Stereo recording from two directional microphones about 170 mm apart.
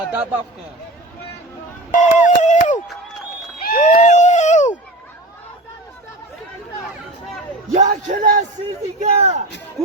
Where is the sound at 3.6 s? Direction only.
55° left (ahead or behind).